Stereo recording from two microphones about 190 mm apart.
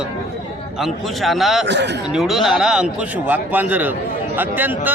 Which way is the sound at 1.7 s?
65° right (ahead or behind).